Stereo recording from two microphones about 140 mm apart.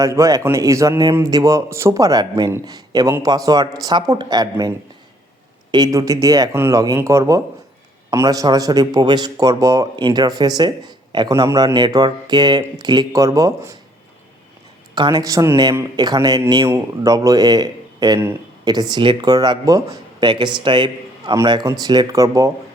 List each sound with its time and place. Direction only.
0.0 s speech: 25° right (ahead or behind)
5.7 s speech: 25° right (ahead or behind)
14.9 s speech: 30° right (ahead or behind)